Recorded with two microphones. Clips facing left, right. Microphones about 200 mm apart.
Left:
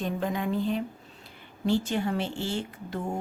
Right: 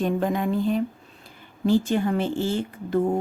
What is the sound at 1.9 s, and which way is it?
Speech, 50° right (ahead or behind).